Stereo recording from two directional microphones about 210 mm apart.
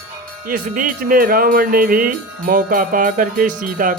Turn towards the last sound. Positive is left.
turn(degrees=-40)  # may be behind; listen again after turning